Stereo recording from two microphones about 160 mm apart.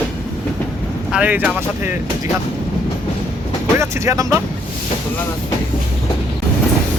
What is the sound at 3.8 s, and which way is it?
Speech, 20° right (ahead or behind).